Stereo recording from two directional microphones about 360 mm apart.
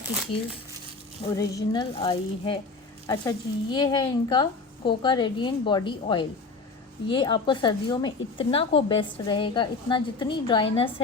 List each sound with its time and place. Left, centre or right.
0.3 s a woman's voice: centre